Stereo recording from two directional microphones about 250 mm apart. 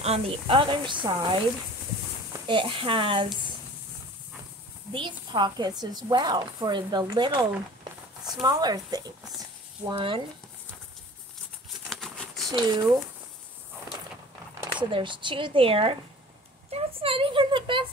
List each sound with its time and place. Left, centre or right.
0.0 s speech: right
2.4 s speech: centre
4.9 s a woman's voice: centre
11.9 s a sound: centre
12.5 s a woman's voice: centre
14.9 s speech: centre